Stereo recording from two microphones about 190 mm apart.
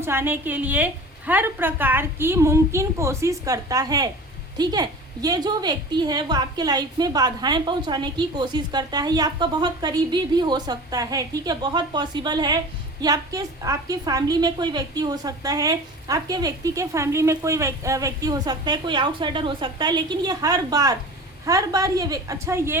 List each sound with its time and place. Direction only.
0.0 s a woman's voice: 10° right (ahead or behind)